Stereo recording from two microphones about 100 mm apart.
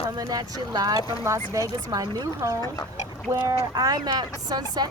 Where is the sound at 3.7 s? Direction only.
40° right (ahead or behind).